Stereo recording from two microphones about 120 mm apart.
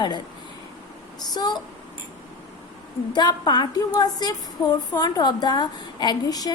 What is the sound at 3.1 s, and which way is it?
A woman's voice, 35° left (ahead or behind).